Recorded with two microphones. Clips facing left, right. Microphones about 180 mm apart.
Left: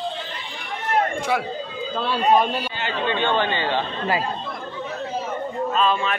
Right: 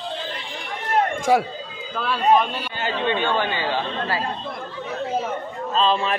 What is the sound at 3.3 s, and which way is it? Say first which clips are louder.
Speech: left 1 dB; 10° right (ahead or behind).